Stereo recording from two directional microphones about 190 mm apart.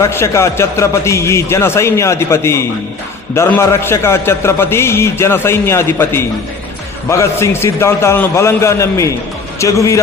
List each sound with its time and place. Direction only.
0.0 s a man's voice: 15° left (ahead or behind)